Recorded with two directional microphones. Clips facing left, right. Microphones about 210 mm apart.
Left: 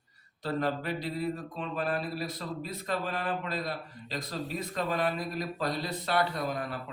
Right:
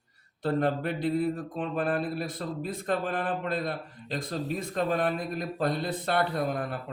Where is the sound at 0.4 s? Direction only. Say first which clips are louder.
Right 4 dB; 55° right (ahead or behind).